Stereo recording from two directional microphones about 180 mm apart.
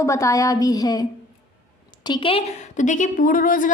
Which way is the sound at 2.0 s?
25° left (ahead or behind).